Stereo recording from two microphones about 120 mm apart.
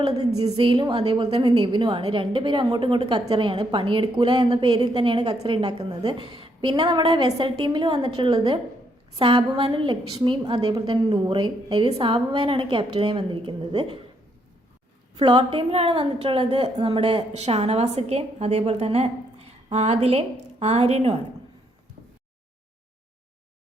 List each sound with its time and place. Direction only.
0.4 s a woman's voice: 45° right (ahead or behind)
7.3 s a woman's voice: 50° right (ahead or behind)
9.1 s a woman's voice: 45° right (ahead or behind)
15.1 s a woman's voice: 50° right (ahead or behind)
17.3 s a woman's voice: 60° right (ahead or behind)